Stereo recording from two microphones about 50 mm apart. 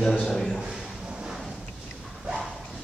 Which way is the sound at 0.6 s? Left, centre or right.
Centre.